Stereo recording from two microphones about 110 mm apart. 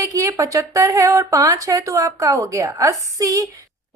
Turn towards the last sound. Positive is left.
turn(degrees=-30)  # may be behind; listen again after turning